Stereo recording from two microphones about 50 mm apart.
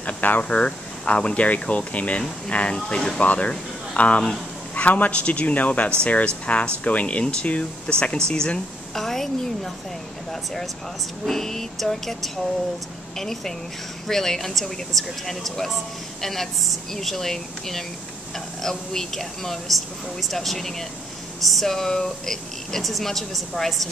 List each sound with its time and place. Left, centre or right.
0.0 s vehicle: left
0.4 s speech: left; by 9.7 s centre
11.2 s speech: centre